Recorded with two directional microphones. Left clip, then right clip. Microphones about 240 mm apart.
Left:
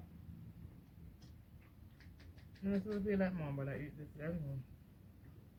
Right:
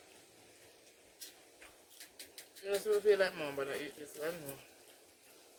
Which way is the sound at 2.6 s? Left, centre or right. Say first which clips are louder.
Right 10 dB; right.